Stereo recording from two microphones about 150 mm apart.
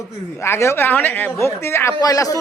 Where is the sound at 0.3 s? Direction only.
15° left (ahead or behind).